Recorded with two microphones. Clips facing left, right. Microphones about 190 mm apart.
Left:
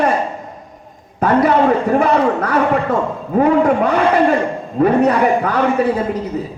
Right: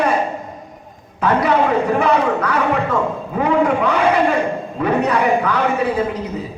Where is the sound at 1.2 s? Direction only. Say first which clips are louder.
Left 3 dB; 50° left (ahead or behind).